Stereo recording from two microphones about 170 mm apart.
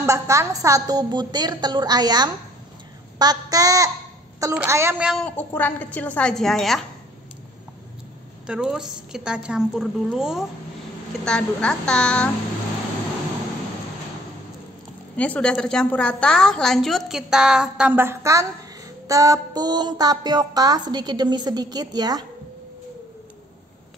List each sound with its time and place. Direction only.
0.0 s a woman's voice: 20° right (ahead or behind)
5.2 s a woman's voice: 10° left (ahead or behind)
8.5 s a woman's voice: 5° right (ahead or behind)
15.1 s a woman's voice: 10° left (ahead or behind); by 22.2 s 25° right (ahead or behind)